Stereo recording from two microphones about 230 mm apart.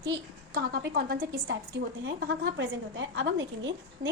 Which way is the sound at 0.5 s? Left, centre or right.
Right.